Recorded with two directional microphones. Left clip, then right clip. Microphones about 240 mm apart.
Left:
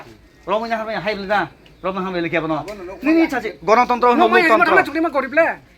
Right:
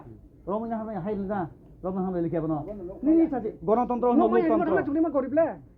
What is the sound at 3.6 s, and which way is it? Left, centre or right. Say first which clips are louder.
Speech: left 10 dB; left.